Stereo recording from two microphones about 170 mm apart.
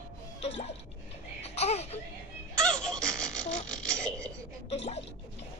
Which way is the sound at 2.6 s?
5° left (ahead or behind).